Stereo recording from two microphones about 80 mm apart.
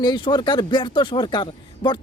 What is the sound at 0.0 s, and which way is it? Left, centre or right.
Speech, left.